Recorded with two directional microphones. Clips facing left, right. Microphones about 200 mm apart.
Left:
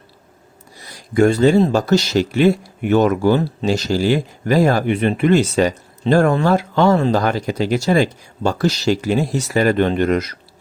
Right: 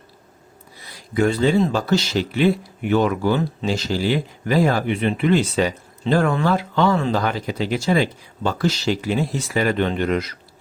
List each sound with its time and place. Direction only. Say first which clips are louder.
0.8 s speech: left 5 dB; 45° left (ahead or behind)